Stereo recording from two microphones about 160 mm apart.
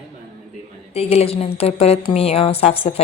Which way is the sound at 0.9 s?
40° left (ahead or behind).